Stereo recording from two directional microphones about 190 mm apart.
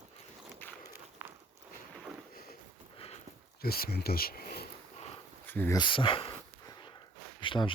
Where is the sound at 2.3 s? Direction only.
50° left (ahead or behind).